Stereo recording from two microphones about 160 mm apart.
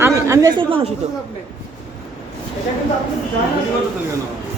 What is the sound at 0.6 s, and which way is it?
Speech, 35° right (ahead or behind).